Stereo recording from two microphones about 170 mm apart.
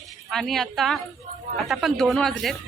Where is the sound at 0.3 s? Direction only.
Centre (ahead or behind).